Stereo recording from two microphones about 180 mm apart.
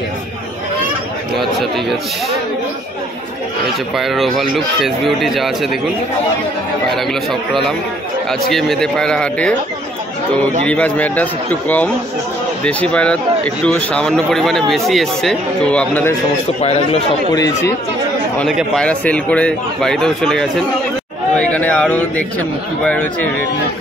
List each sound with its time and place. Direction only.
1.4 s speech: centre (ahead or behind)
3.9 s speech: centre (ahead or behind)
8.3 s speech: centre (ahead or behind)
10.6 s a man's voice: 5° left (ahead or behind)
16.6 s a man's voice: 35° left (ahead or behind)
17.4 s a man's voice: 15° left (ahead or behind)
18.4 s a man's voice: 5° left (ahead or behind)